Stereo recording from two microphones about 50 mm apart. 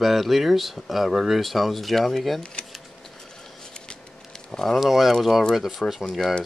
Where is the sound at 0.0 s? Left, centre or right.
Centre.